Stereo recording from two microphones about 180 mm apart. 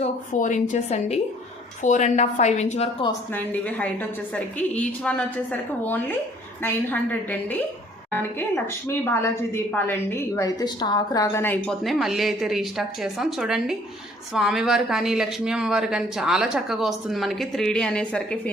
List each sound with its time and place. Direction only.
0.3 s speech: 45° left (ahead or behind)
3.1 s speech: 10° left (ahead or behind)